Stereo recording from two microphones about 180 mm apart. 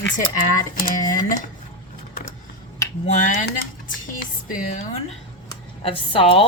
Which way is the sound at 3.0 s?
45° left (ahead or behind).